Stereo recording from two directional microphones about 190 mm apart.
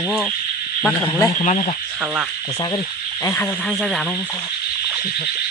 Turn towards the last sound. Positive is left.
turn(degrees=5)  # may be behind; listen again after turning